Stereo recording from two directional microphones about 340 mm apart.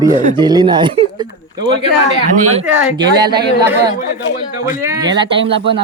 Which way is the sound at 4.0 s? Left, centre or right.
Left.